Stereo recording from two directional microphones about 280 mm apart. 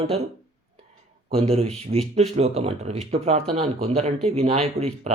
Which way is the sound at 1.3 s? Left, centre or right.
Right.